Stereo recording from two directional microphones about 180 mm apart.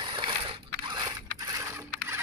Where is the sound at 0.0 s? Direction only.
25° right (ahead or behind).